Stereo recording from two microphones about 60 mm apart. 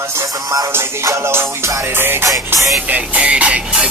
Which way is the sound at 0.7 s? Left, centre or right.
Right.